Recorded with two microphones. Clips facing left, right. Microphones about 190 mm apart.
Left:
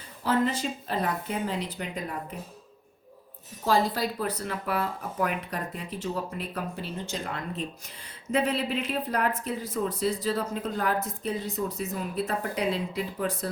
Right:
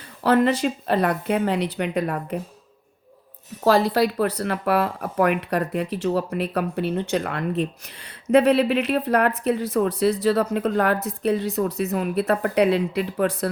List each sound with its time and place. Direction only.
0.2 s speech: 70° right (ahead or behind)
3.6 s speech: 70° right (ahead or behind)